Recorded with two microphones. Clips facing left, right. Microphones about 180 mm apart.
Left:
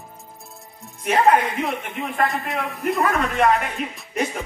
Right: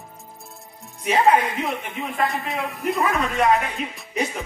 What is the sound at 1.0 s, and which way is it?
Speech, 5° right (ahead or behind).